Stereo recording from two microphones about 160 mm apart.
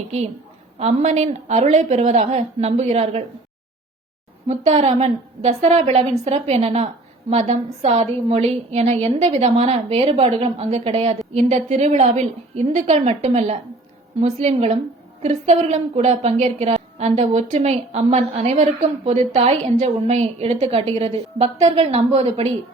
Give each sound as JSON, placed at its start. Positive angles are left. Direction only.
{"t": 0.8, "sound": "a woman's voice", "side_deg": -40}
{"t": 4.4, "sound": "a woman's voice", "side_deg": -45}